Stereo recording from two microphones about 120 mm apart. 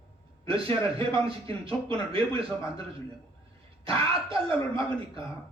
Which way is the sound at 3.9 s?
50° right (ahead or behind).